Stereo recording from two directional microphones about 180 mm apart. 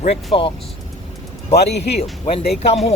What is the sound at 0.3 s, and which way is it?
Speech, 30° left (ahead or behind).